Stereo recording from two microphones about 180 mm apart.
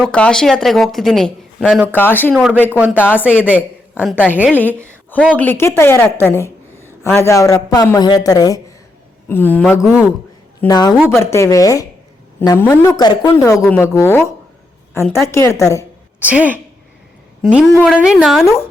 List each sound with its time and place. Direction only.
0.0 s speech: 5° left (ahead or behind)
1.9 s a woman's voice: 10° left (ahead or behind)
2.3 s a woman's voice: 5° right (ahead or behind)
2.9 s a woman's voice: 10° left (ahead or behind)
3.2 s a woman's voice: 5° right (ahead or behind)
4.5 s a woman's voice: 10° left (ahead or behind)
10.7 s speech: 20° left (ahead or behind)
10.9 s speech: centre (ahead or behind)
11.2 s a woman's voice: 15° left (ahead or behind)
16.2 s a woman's voice: 10° right (ahead or behind)